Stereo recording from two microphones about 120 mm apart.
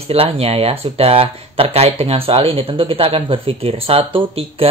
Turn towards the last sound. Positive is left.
turn(degrees=-50)  # may be behind; listen again after turning